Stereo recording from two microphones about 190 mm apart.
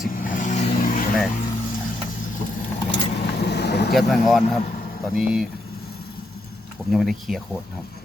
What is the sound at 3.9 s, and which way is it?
Speech, centre (ahead or behind).